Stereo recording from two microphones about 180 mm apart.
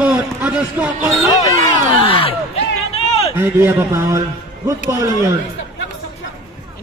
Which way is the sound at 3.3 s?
15° right (ahead or behind).